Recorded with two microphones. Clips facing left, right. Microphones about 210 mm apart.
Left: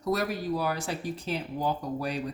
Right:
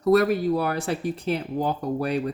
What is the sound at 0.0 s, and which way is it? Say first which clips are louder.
Speech: right 10 dB; 60° right (ahead or behind).